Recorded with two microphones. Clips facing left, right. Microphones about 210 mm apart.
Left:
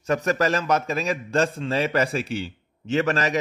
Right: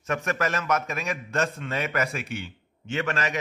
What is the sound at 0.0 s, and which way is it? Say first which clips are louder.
A man's voice: left 5 dB; 35° left (ahead or behind).